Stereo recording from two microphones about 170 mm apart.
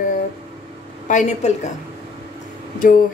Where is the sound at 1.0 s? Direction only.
45° left (ahead or behind).